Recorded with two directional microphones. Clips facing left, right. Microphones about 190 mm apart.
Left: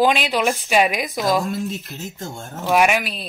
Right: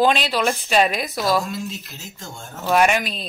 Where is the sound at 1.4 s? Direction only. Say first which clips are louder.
Left 4 dB; 55° left (ahead or behind).